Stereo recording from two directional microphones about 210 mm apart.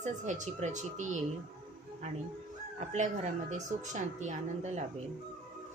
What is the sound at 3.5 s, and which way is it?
Speech, 35° right (ahead or behind).